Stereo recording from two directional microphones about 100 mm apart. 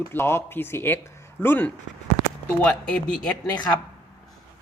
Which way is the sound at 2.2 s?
80° right.